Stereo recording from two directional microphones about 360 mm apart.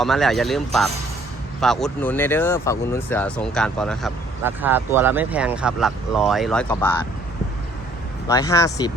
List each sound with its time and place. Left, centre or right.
0.0 s speech: centre
8.3 s speech: centre